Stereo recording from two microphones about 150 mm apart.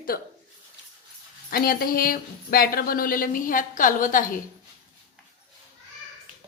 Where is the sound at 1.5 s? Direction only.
80° left; by 4.4 s 60° left (ahead or behind).